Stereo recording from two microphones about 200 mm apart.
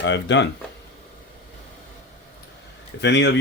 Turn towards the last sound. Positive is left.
turn(degrees=60)  # may be behind; listen again after turning